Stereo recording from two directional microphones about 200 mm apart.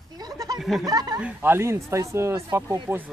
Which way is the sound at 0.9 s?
20° right (ahead or behind).